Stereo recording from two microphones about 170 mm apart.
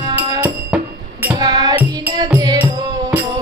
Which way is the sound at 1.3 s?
25° right (ahead or behind).